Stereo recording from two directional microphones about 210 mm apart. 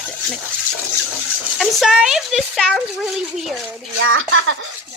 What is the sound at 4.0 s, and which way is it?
Speech, 70° right (ahead or behind).